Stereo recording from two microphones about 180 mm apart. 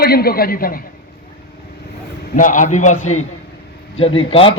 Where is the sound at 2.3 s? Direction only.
45° left (ahead or behind).